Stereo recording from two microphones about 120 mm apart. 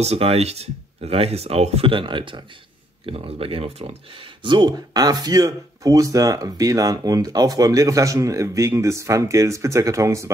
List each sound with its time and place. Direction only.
0.0 s speech: 60° right (ahead or behind); by 2.4 s 40° right (ahead or behind)
3.1 s speech: 50° right (ahead or behind)
4.4 s speech: 40° right (ahead or behind); by 10.3 s 25° right (ahead or behind)